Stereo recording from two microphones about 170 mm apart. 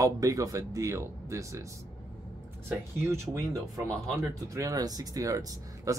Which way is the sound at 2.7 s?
15° right (ahead or behind).